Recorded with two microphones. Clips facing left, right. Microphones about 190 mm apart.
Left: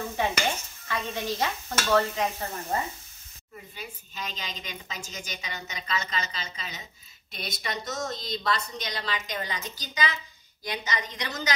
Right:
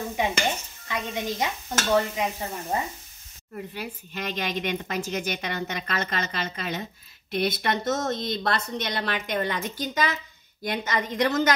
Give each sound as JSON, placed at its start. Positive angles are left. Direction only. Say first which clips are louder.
{"t": 0.4, "sound": "stir", "louder": "right 2 dB", "side_deg": -10}
{"t": 2.7, "sound": "sizzle", "louder": "right 1 dB", "side_deg": -15}
{"t": 3.5, "sound": "a woman's voice", "louder": "right 8 dB", "side_deg": -65}